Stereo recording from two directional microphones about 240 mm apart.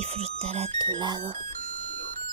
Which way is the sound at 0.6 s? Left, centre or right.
Centre.